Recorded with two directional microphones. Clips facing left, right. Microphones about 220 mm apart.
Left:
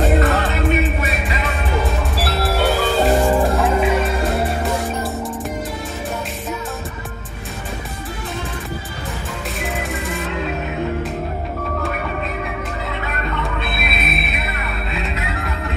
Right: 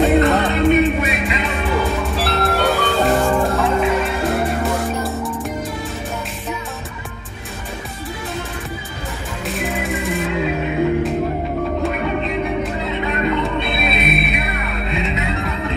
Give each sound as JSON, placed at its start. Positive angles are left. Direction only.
{"t": 0.1, "sound": "music", "side_deg": 0}
{"t": 3.2, "sound": "music", "side_deg": 20}
{"t": 3.4, "sound": "music", "side_deg": 0}
{"t": 9.6, "sound": "music", "side_deg": 0}
{"t": 13.4, "sound": "music", "side_deg": 0}